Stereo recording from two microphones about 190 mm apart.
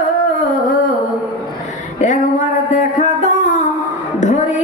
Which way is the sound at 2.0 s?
40° left (ahead or behind).